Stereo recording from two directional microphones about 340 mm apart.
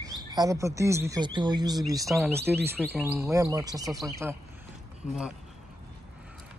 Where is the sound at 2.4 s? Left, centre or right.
Right.